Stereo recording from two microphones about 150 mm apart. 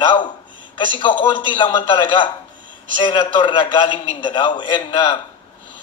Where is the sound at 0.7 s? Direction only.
35° left (ahead or behind).